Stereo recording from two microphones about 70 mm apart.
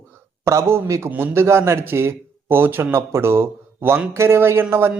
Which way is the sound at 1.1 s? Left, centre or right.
Right.